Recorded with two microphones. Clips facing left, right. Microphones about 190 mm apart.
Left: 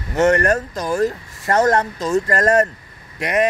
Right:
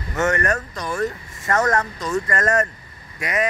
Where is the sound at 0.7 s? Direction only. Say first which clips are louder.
Left 5 dB; 35° left (ahead or behind).